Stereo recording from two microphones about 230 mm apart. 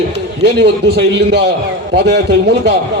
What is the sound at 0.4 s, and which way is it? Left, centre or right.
A man's voice, right.